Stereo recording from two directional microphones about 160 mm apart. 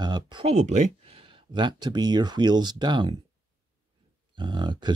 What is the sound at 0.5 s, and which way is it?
Speech, 45° right (ahead or behind).